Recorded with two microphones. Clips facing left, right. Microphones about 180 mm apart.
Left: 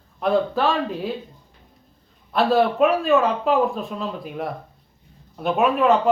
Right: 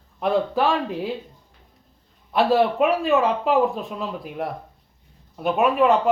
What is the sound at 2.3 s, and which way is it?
Speech, 15° right (ahead or behind).